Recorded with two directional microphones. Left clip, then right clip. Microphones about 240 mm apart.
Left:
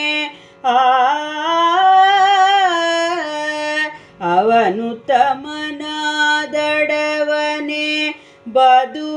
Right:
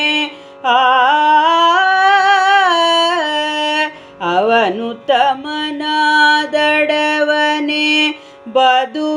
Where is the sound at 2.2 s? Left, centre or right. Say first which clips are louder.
Even; right.